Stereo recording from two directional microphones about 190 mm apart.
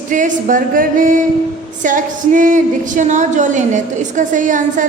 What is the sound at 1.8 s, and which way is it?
A woman's voice, 45° right (ahead or behind).